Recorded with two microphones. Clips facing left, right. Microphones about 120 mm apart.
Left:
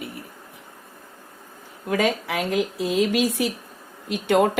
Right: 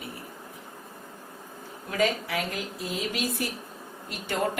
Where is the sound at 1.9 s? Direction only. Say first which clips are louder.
Left 4 dB; 85° left.